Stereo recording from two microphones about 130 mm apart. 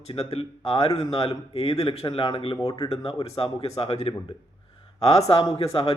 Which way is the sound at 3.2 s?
50° left (ahead or behind).